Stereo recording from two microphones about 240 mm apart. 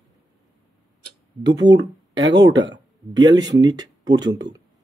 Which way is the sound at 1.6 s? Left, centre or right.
Centre.